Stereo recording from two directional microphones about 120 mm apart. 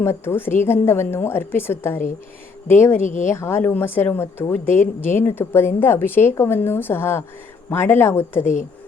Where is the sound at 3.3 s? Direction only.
20° left (ahead or behind).